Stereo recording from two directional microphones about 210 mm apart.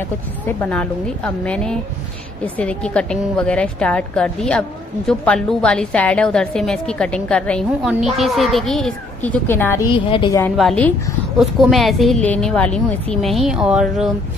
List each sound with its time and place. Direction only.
0.6 s a woman's voice: 5° left (ahead or behind)
9.9 s a woman's voice: 25° left (ahead or behind)
10.6 s a woman's voice: 5° left (ahead or behind)